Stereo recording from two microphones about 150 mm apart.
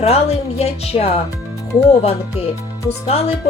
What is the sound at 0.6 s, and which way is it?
Speech, 45° left (ahead or behind).